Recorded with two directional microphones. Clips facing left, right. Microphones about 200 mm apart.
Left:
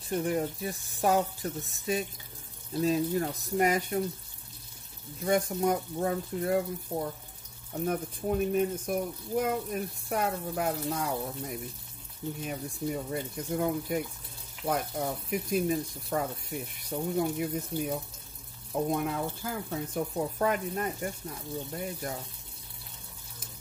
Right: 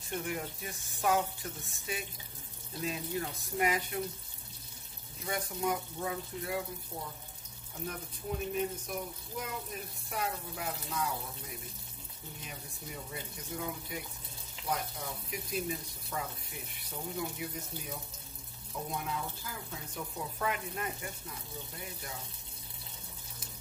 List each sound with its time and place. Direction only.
0.1 s speech: 35° left (ahead or behind)
5.2 s speech: 45° left (ahead or behind)